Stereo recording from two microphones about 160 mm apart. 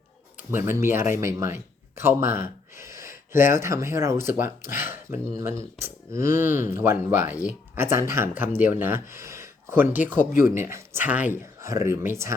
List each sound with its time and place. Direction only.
0.3 s speech: 15° right (ahead or behind)